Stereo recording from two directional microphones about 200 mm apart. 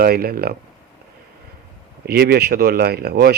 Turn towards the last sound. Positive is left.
turn(degrees=-55)  # may be behind; listen again after turning